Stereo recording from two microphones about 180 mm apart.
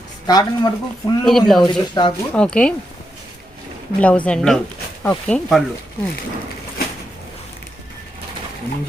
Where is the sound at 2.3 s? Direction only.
5° left (ahead or behind).